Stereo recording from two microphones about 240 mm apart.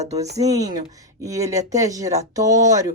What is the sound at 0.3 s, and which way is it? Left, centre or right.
Speech, centre.